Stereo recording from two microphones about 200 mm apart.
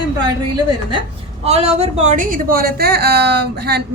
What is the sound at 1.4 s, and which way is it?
A woman's voice, 30° right (ahead or behind).